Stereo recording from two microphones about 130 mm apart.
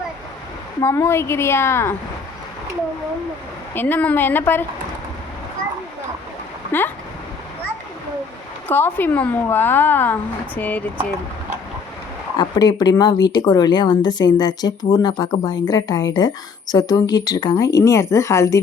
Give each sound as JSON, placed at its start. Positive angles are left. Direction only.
{"t": 0.8, "sound": "a woman's voice", "side_deg": 20}
{"t": 3.8, "sound": "speech", "side_deg": 15}
{"t": 6.7, "sound": "speech", "side_deg": 15}
{"t": 8.6, "sound": "speech", "side_deg": 15}
{"t": 12.4, "sound": "speech", "side_deg": 30}